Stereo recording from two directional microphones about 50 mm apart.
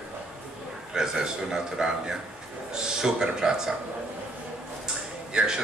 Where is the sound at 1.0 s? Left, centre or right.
Centre.